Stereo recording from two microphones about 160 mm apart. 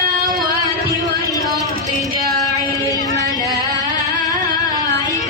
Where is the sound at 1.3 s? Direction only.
20° left (ahead or behind).